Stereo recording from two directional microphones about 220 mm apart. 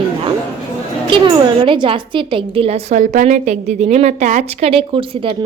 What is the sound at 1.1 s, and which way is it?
A woman's voice, 20° right (ahead or behind).